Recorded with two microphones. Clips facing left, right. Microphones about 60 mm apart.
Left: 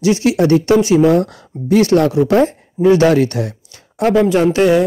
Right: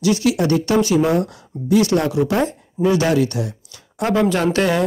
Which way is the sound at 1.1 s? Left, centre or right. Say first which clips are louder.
Left 5 dB; left.